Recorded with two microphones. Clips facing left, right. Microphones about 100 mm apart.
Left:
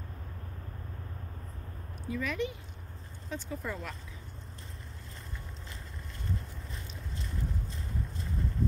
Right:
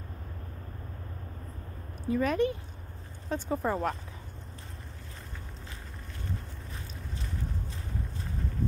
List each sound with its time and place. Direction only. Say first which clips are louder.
2.0 s speech: right 7 dB; 45° right (ahead or behind)